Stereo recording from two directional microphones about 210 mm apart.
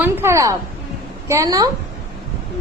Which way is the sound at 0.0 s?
10° right (ahead or behind).